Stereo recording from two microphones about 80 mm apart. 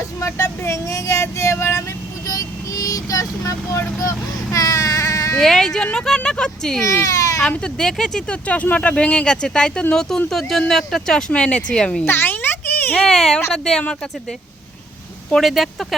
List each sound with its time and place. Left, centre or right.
0.2 s vehicle: left
2.2 s vehicle: left
4.5 s baby cry: left
5.4 s speech: centre
6.8 s speech: left
7.4 s speech: centre
12.0 s a sound: left
13.0 s speech: centre
15.3 s speech: centre